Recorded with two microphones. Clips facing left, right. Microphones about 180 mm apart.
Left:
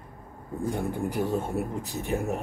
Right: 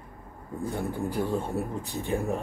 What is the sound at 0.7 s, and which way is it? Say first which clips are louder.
Speech: even; 15° left (ahead or behind).